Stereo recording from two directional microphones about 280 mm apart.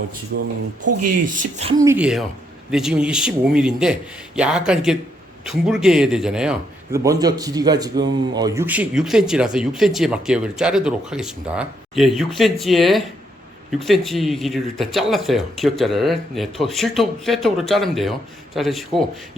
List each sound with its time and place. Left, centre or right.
0.3 s speech: right
0.8 s speech: right
1.8 s a man's voice: centre